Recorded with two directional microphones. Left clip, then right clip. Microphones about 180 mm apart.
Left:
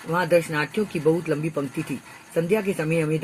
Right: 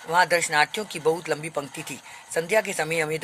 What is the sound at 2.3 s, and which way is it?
Speech, 45° right (ahead or behind).